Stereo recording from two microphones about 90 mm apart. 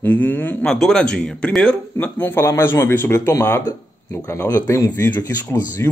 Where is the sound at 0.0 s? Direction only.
20° left (ahead or behind).